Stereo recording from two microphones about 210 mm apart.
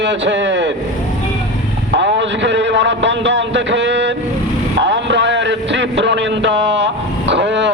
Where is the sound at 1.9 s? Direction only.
60° right (ahead or behind).